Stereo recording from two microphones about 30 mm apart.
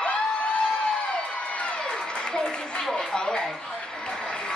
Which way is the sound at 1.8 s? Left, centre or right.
Left.